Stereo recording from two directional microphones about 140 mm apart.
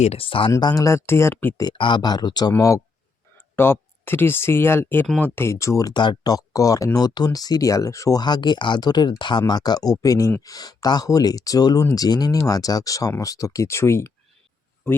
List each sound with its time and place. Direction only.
0.0 s speech: 45° left (ahead or behind)
0.5 s speech: 25° left (ahead or behind)
1.6 s speech: 30° left (ahead or behind); by 5.0 s 15° left (ahead or behind)
5.0 s speech: 5° left (ahead or behind)
5.3 s speech: 20° left (ahead or behind)